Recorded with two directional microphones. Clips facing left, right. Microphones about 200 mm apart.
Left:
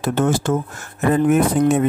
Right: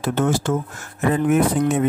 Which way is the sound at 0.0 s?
45° left (ahead or behind).